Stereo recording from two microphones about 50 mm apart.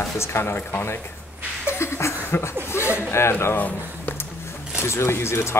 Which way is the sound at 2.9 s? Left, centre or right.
Left.